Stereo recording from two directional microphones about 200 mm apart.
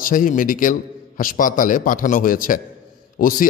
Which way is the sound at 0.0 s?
40° left (ahead or behind).